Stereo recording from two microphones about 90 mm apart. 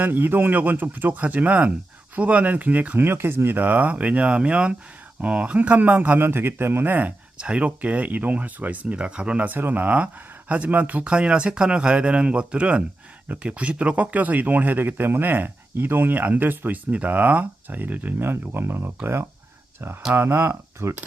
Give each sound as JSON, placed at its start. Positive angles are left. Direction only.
{"t": 0.0, "sound": "a man's voice", "side_deg": -20}